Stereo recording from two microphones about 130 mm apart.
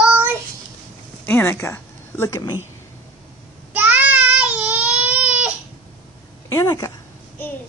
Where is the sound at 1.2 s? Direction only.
15° left (ahead or behind).